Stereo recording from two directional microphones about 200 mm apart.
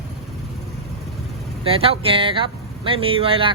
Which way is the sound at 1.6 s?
30° right (ahead or behind).